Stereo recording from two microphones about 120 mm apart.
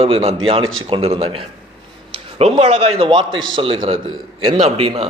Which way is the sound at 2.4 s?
55° right (ahead or behind).